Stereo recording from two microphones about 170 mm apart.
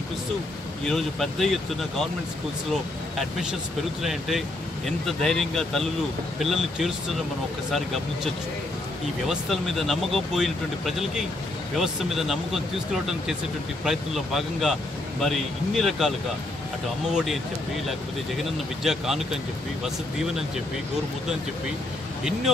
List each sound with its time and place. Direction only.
0.8 s speech: centre (ahead or behind)
4.0 s speech: centre (ahead or behind)
9.3 s speech: centre (ahead or behind)
17.1 s speech: 5° right (ahead or behind)
18.4 s speech: centre (ahead or behind)